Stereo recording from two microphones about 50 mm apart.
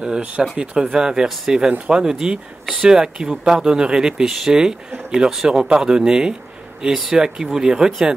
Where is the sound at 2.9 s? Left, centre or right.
Centre.